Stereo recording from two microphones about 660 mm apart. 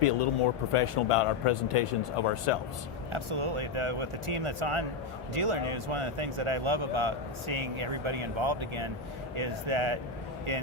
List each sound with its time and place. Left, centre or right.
0.0 s speech: left
3.1 s speech: right